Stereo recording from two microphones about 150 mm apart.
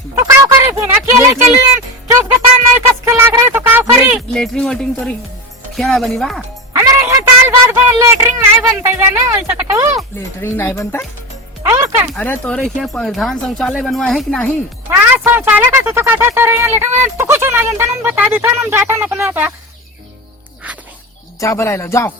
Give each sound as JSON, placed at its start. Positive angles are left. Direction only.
{"t": 0.3, "sound": "speech", "side_deg": -20}
{"t": 2.7, "sound": "speech", "side_deg": -15}
{"t": 4.4, "sound": "speech", "side_deg": 5}
{"t": 6.7, "sound": "speech", "side_deg": -15}
{"t": 10.2, "sound": "speech", "side_deg": 15}
{"t": 11.6, "sound": "speech", "side_deg": -15}
{"t": 12.1, "sound": "speech", "side_deg": 10}
{"t": 14.9, "sound": "speech", "side_deg": -15}
{"t": 21.4, "sound": "speech", "side_deg": 20}